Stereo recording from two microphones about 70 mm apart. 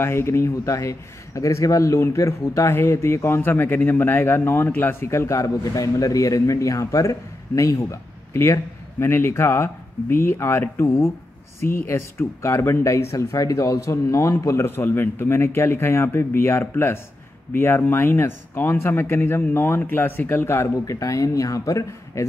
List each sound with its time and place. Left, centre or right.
0.0 s a man's voice: left
14.8 s speech: left
20.8 s a man's voice: left